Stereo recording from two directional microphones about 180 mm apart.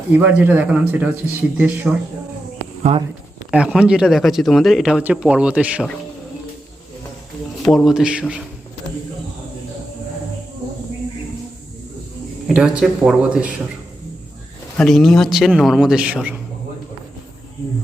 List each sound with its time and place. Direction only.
0.1 s speech: 10° right (ahead or behind)
2.9 s speech: 35° right (ahead or behind)
3.5 s speech: 5° right (ahead or behind)
7.6 s speech: 5° left (ahead or behind)
12.5 s speech: 5° right (ahead or behind)
14.8 s speech: centre (ahead or behind)